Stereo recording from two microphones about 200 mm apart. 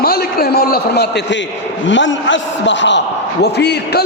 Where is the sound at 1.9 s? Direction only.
65° left (ahead or behind).